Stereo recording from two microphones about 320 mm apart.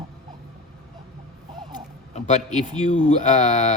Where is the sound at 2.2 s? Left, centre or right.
Left.